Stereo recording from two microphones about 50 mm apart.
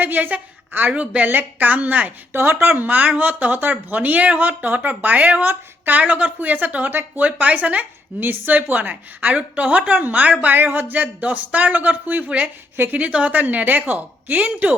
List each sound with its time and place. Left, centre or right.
0.0 s speech: right
2.3 s speech: right
2.6 s speech: right
5.5 s speech: right
6.0 s speech: right
8.2 s a woman's voice: right
13.0 s speech: right